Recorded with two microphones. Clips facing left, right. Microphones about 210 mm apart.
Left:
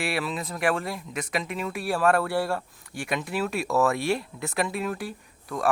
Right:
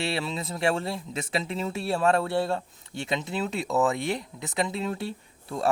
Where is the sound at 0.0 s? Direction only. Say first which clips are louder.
Left 1 dB; 25° right (ahead or behind).